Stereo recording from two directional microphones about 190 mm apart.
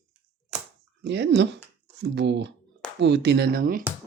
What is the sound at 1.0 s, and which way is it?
Speech, 65° right (ahead or behind).